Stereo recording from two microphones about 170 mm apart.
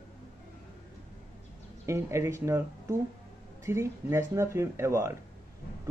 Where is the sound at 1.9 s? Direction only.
15° right (ahead or behind).